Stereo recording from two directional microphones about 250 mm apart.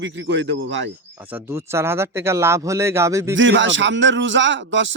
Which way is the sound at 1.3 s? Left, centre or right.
Centre.